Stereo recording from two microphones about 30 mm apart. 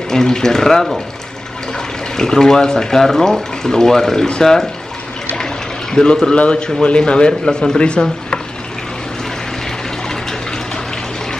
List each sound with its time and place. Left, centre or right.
0.1 s speech: centre
2.1 s speech: centre
5.3 s water: left
6.3 s speech: left
7.4 s speech: left
7.8 s speech: left